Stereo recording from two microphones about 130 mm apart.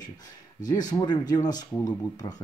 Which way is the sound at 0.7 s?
30° left (ahead or behind).